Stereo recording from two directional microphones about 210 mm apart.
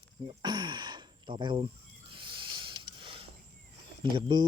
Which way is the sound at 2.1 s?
25° right (ahead or behind).